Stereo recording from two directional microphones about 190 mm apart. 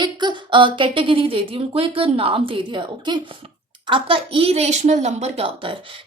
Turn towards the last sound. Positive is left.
turn(degrees=-30)  # may be behind; listen again after turning